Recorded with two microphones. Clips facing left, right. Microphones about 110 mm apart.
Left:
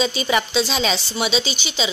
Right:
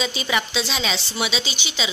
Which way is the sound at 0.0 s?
35° left (ahead or behind).